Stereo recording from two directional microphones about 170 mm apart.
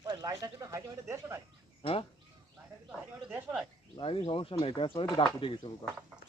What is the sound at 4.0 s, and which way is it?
Speech, 30° left (ahead or behind).